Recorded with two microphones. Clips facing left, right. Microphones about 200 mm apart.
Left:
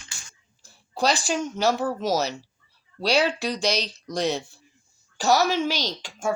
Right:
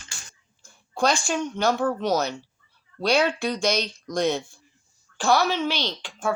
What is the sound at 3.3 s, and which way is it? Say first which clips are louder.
Speech: right 1 dB; 35° left (ahead or behind).